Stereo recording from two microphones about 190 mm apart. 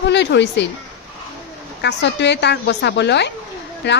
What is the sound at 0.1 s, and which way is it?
Speech, 65° left (ahead or behind).